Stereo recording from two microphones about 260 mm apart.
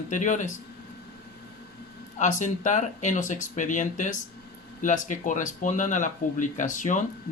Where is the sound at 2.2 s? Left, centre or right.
Left.